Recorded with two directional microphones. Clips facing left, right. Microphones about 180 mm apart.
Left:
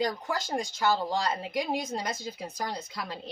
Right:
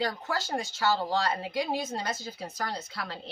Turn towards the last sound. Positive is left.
turn(degrees=15)  # may be behind; listen again after turning